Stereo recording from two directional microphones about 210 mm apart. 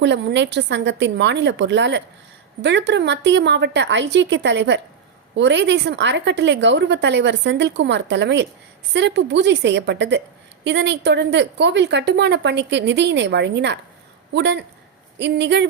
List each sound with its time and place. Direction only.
0.0 s a woman's voice: 55° right (ahead or behind)